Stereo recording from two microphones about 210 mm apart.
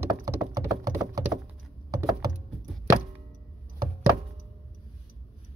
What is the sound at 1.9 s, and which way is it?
Typing, 15° right (ahead or behind).